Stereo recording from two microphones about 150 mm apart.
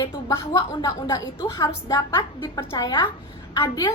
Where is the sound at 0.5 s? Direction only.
30° left (ahead or behind).